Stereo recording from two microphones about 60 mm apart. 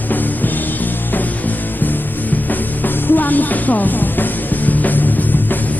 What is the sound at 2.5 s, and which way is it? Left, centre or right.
Music, left.